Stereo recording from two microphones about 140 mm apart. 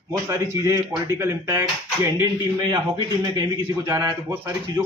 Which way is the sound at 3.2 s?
30° right (ahead or behind).